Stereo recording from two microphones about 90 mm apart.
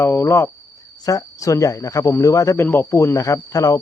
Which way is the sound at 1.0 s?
40° left (ahead or behind).